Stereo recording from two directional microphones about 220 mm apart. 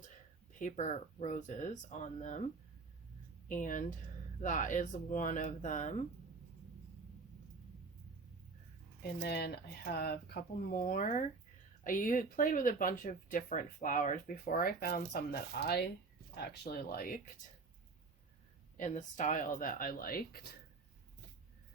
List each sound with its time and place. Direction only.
0.6 s speech: 30° left (ahead or behind)
3.5 s speech: 35° left (ahead or behind)
9.2 s speech: 50° left (ahead or behind)
18.8 s speech: 35° left (ahead or behind)